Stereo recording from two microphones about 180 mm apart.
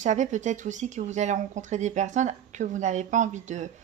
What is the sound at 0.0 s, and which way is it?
Speech, 40° right (ahead or behind).